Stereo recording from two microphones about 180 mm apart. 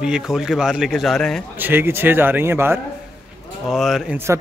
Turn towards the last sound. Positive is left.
turn(degrees=0)  # may be behind; listen again after turning